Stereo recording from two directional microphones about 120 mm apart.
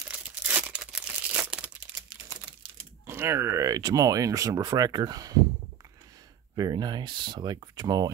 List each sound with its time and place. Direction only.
0.0 s crumpling: 10° right (ahead or behind)
3.1 s speech: 20° right (ahead or behind)
6.5 s speech: 35° right (ahead or behind)